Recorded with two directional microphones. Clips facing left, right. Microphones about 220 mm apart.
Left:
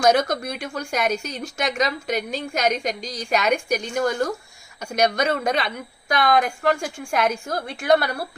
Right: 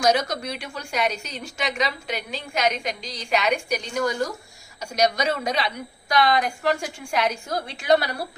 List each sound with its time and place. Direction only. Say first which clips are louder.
0.0 s a woman's voice: left 3 dB; 50° left (ahead or behind)